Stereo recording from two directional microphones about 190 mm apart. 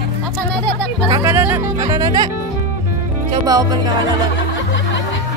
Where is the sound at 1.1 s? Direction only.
15° right (ahead or behind).